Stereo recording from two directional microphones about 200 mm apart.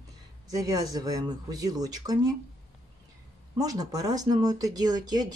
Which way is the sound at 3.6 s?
20° right (ahead or behind).